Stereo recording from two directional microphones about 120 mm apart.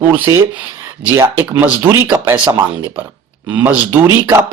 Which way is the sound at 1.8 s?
15° right (ahead or behind).